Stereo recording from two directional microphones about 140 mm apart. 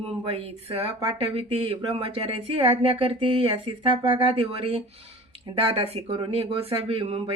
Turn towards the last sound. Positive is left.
turn(degrees=-40)  # may be behind; listen again after turning